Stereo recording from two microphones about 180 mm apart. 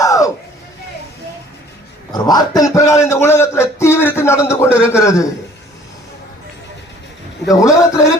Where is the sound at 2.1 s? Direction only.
20° left (ahead or behind).